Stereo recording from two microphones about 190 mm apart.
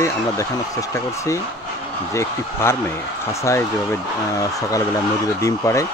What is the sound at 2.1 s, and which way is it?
Speech, 15° left (ahead or behind).